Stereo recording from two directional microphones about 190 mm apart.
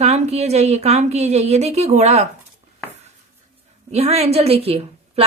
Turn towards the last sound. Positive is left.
turn(degrees=-30)  # may be behind; listen again after turning